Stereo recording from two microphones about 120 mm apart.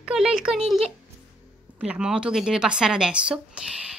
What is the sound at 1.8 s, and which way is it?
Speech, 10° right (ahead or behind).